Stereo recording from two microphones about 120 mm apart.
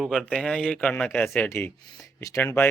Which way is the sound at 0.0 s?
Centre (ahead or behind).